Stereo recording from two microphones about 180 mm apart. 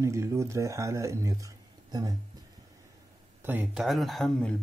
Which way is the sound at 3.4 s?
10° right (ahead or behind).